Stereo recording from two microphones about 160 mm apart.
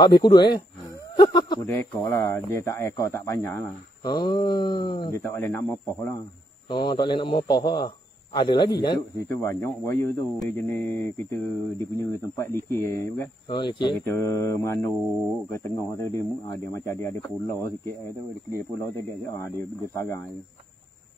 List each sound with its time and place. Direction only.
0.0 s speech: 25° left (ahead or behind)
1.7 s speech: 15° left (ahead or behind)
4.0 s speech: 25° left (ahead or behind)
5.2 s speech: 10° left (ahead or behind)
6.7 s speech: 30° left (ahead or behind)
9.3 s speech: 15° left (ahead or behind)
13.5 s speech: 30° left (ahead or behind)
13.9 s speech: 10° left (ahead or behind)